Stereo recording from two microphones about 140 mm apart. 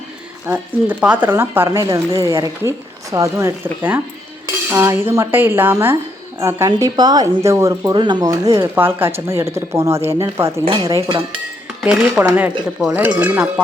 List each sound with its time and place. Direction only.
0.4 s a woman's voice: 10° right (ahead or behind)
11.8 s speech: 5° right (ahead or behind)